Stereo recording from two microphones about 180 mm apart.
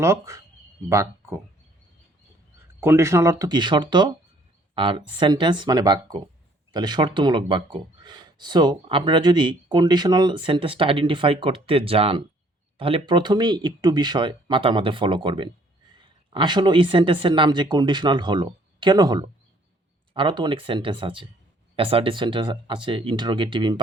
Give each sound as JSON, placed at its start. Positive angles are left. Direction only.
{"t": 0.0, "sound": "speech", "side_deg": -15}
{"t": 2.8, "sound": "speech", "side_deg": -15}